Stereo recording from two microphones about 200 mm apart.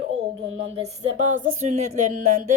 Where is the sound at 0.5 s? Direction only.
30° right (ahead or behind).